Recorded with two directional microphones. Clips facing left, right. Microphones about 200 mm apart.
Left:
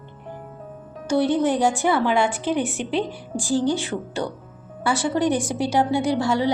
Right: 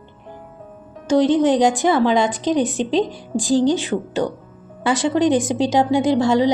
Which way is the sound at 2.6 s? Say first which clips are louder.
Right 5 dB; 90° right.